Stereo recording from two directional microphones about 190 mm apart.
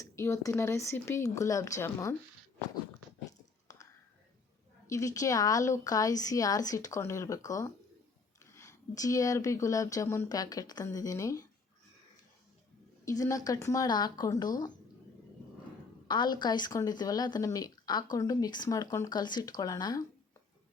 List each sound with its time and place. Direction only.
0.0 s speech: 15° left (ahead or behind)
3.7 s whispering: 15° left (ahead or behind)
4.9 s speech: 15° left (ahead or behind)
13.1 s a woman's voice: 15° left (ahead or behind)
16.0 s a woman's voice: 25° left (ahead or behind)